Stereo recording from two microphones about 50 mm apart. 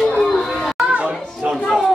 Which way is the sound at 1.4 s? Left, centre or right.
Centre.